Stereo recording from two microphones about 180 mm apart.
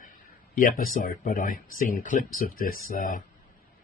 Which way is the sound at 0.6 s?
50° left (ahead or behind).